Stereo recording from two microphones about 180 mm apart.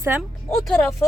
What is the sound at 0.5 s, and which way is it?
Speech, centre (ahead or behind).